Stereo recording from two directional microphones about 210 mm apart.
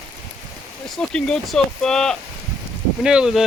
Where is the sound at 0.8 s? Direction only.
Centre (ahead or behind).